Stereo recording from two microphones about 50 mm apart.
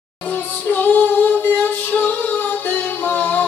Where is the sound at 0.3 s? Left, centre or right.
Left.